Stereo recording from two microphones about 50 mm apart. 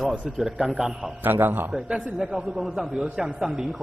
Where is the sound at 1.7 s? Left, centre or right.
Centre.